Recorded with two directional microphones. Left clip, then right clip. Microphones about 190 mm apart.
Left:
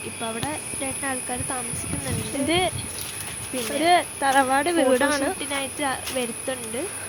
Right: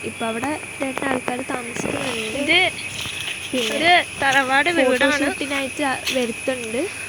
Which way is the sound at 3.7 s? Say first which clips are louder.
Right 3 dB; 10° left (ahead or behind).